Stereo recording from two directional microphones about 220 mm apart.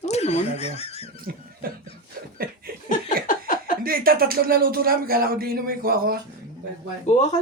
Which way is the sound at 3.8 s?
40° right (ahead or behind).